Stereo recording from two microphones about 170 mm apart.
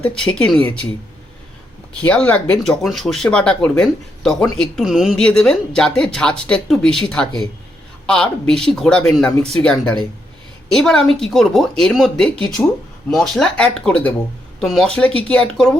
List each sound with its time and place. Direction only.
0.0 s speech: 5° left (ahead or behind)
2.0 s speech: 10° left (ahead or behind)